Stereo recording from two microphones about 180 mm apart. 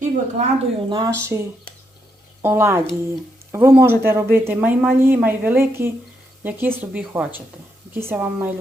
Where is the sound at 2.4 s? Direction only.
15° right (ahead or behind).